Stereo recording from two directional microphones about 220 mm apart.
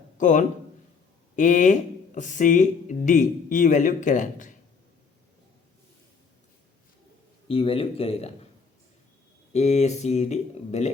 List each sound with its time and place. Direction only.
0.2 s a man's voice: 35° left (ahead or behind)
7.4 s a man's voice: 25° left (ahead or behind)
9.5 s speech: 30° left (ahead or behind)